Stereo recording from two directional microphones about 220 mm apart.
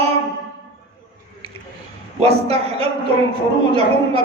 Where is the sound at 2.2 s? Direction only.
25° right (ahead or behind).